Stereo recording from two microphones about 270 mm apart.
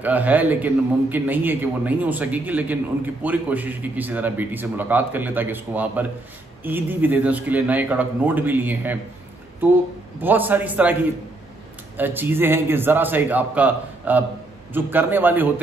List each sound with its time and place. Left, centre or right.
0.0 s a man's voice: centre
10.2 s a man's voice: centre
12.0 s a man's voice: centre